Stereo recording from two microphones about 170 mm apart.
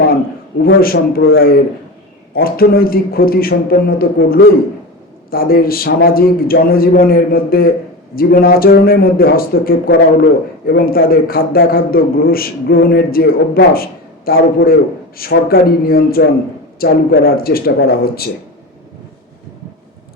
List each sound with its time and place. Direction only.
0.6 s a man's voice: 60° left (ahead or behind)